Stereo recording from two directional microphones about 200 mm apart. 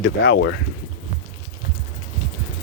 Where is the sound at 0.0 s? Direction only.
65° left (ahead or behind).